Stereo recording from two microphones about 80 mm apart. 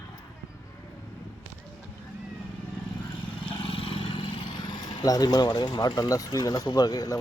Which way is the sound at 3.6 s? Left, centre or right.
Left.